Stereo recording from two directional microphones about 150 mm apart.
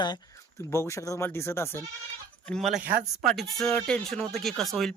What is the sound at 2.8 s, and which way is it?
Speech, 70° right (ahead or behind).